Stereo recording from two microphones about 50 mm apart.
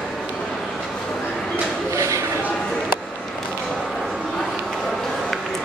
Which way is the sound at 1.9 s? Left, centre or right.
Right.